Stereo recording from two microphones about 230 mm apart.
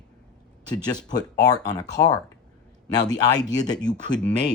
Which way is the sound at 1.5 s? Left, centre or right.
Centre.